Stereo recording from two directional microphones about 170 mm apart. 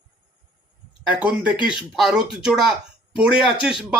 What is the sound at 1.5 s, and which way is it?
Speech, 25° left (ahead or behind).